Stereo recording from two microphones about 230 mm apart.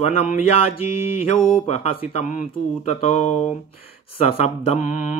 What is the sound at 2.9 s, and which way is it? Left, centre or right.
Mantra, left.